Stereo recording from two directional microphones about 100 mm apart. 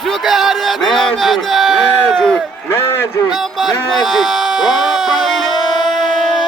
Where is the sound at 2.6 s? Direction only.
25° left (ahead or behind).